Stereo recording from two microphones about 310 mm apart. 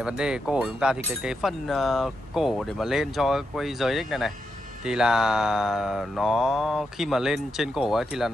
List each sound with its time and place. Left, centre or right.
0.0 s speech: centre